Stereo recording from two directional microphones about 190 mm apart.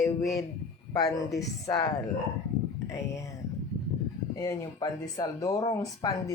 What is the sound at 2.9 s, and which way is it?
Speech, 15° left (ahead or behind).